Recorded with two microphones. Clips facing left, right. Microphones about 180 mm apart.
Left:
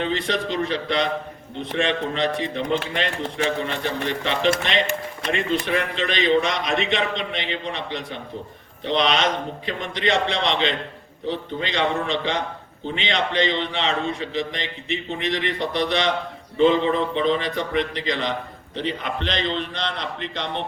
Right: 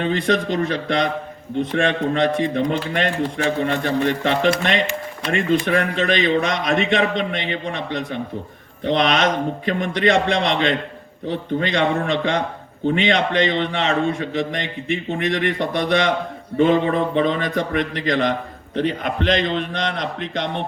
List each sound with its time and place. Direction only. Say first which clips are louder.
0.0 s a man's voice: right 4 dB; 50° right (ahead or behind)